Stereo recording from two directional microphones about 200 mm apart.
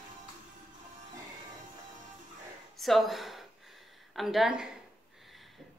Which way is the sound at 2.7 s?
Centre (ahead or behind).